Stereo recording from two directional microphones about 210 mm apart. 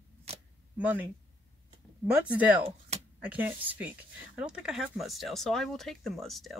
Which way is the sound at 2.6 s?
30° right (ahead or behind).